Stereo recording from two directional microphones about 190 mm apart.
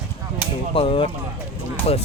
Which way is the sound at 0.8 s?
30° left (ahead or behind).